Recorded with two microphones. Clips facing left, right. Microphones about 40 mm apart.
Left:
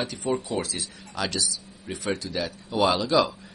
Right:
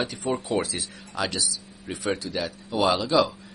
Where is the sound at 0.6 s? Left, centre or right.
Centre.